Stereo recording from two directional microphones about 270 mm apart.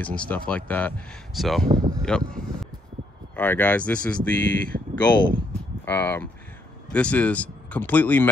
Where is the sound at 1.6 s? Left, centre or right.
Right.